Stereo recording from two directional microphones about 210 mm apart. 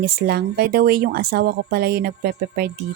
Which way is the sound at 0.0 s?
50° right (ahead or behind).